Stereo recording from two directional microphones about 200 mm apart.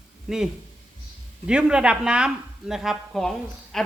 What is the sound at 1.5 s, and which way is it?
Speech, 5° right (ahead or behind).